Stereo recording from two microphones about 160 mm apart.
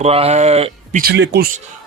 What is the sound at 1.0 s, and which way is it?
Speech, 90° right.